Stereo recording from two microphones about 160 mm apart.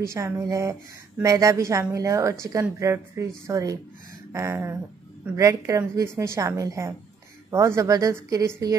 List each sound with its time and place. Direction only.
0.0 s a woman's voice: 20° right (ahead or behind)
4.3 s a sound: 15° right (ahead or behind)
5.3 s a woman's voice: 20° right (ahead or behind)